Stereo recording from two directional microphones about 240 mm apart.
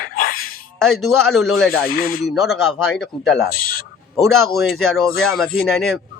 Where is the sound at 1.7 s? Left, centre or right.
Left.